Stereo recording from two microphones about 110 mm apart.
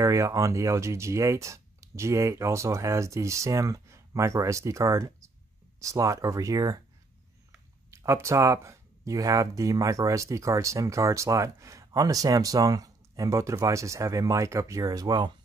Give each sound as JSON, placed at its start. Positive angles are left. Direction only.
{"t": 0.0, "sound": "speech", "side_deg": -30}
{"t": 7.9, "sound": "speech", "side_deg": -25}